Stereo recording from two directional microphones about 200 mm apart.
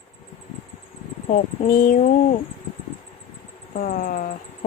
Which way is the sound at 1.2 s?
40° left (ahead or behind).